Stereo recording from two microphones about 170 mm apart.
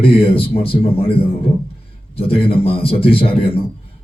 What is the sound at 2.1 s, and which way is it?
Speech, 35° left (ahead or behind).